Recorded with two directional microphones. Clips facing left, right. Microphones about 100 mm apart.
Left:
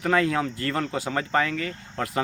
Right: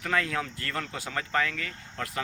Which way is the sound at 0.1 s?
20° left (ahead or behind).